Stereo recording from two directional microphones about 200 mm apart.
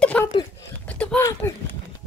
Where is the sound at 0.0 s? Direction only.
5° left (ahead or behind).